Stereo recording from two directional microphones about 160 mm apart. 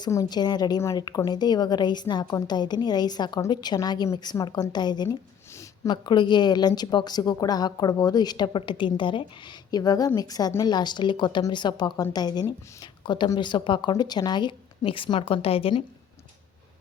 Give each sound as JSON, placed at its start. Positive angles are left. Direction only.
{"t": 0.0, "sound": "a woman's voice", "side_deg": 25}